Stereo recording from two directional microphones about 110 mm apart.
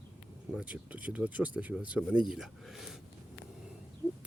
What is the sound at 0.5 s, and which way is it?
Speech, 15° right (ahead or behind).